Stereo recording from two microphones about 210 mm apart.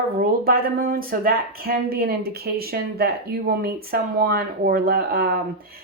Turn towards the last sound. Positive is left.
turn(degrees=-45)  # may be behind; listen again after turning